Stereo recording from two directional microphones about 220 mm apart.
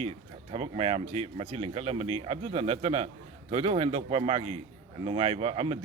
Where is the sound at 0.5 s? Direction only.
30° right (ahead or behind).